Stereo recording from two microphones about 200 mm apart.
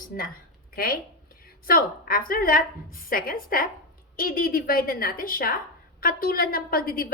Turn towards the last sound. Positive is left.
turn(degrees=45)  # may be behind; listen again after turning